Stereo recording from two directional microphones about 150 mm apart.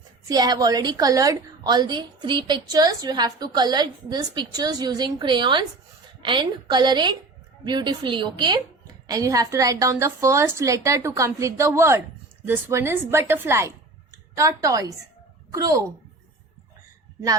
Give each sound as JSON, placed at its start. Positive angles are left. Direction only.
{"t": 0.3, "sound": "a woman's voice", "side_deg": -25}